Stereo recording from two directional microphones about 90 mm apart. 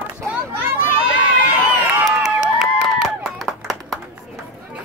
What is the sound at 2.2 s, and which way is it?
Applause, 5° right (ahead or behind).